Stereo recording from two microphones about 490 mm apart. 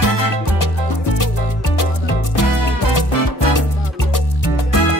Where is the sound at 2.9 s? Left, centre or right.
Left.